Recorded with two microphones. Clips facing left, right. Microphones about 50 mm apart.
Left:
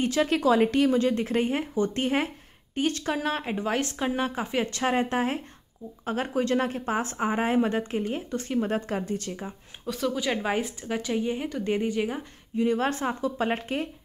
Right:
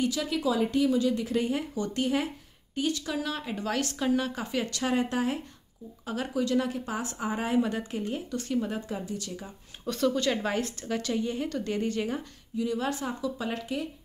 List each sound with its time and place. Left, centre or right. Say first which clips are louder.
0.0 s speech: left 5 dB; left
0.4 s speech: left 3 dB; left
0.8 s speech: left 2 dB; left
3.5 s a woman's voice: left 3 dB; left
8.6 s speech: left 5 dB; left
9.8 s a woman's voice: right 1 dB; centre
12.5 s speech: left 5 dB; left